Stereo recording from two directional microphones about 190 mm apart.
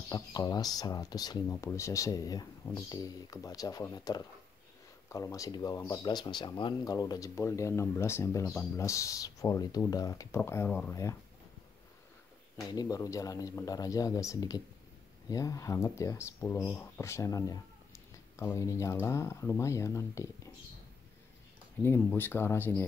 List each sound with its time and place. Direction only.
0.1 s speech: 20° left (ahead or behind)
12.6 s speech: 20° left (ahead or behind)
21.8 s speech: 10° left (ahead or behind)